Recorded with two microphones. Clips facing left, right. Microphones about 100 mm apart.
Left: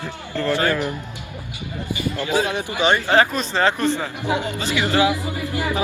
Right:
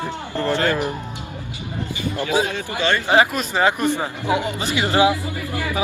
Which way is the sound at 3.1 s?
10° right (ahead or behind).